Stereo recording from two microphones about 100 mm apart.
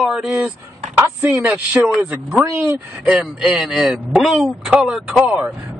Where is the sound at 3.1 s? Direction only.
5° right (ahead or behind).